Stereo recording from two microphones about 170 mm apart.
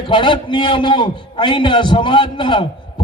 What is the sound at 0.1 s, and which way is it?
A man's voice, 25° left (ahead or behind).